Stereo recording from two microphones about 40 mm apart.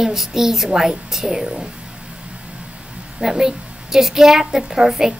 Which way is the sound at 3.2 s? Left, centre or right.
Centre.